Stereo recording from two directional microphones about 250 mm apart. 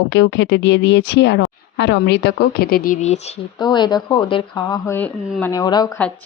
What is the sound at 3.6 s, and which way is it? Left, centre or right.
A woman's voice, centre.